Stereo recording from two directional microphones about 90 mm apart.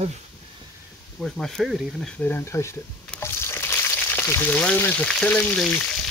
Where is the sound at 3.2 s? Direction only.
30° left (ahead or behind).